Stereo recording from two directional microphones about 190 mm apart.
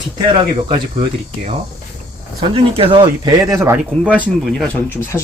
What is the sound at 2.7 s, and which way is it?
Speech, 25° right (ahead or behind).